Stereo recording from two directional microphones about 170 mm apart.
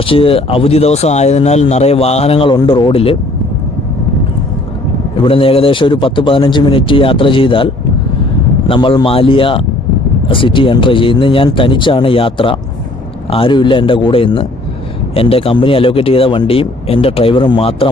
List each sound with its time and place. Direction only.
0.0 s speech: 35° left (ahead or behind)
5.2 s a man's voice: 35° left (ahead or behind)